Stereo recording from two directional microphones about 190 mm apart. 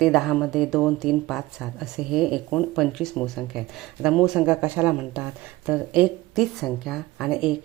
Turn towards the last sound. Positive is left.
turn(degrees=-5)  # may be behind; listen again after turning